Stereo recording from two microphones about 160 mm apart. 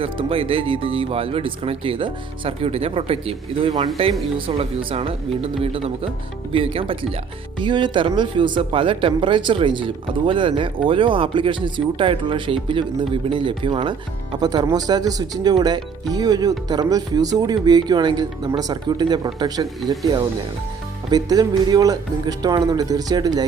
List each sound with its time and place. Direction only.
0.0 s speech: 35° right (ahead or behind)
21.1 s speech: 25° right (ahead or behind)